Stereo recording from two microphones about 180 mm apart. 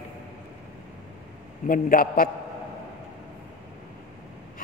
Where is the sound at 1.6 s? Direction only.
50° left (ahead or behind).